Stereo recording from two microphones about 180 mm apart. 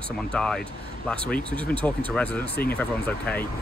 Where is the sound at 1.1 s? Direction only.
10° left (ahead or behind).